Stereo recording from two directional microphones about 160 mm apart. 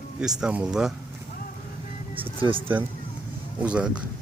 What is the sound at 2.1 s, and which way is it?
Speech, 35° right (ahead or behind).